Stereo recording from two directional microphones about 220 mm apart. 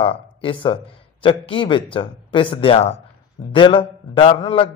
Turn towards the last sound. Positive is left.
turn(degrees=25)  # may be behind; listen again after turning